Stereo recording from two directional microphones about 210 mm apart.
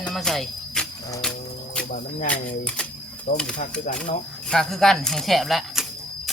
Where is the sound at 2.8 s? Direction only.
5° left (ahead or behind).